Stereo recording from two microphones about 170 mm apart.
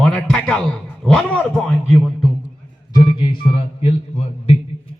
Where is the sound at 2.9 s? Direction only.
25° left (ahead or behind).